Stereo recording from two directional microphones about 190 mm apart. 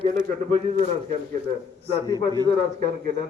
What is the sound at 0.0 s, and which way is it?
Speech, 40° right (ahead or behind).